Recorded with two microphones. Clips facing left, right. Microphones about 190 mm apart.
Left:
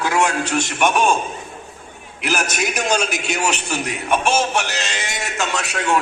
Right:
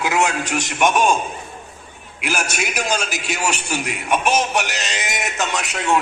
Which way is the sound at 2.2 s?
10° right (ahead or behind).